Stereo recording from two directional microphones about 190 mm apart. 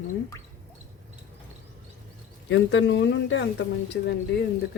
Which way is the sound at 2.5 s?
70° left (ahead or behind).